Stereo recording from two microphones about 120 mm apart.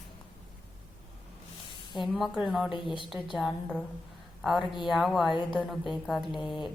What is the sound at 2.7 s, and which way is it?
Speech, 45° left (ahead or behind).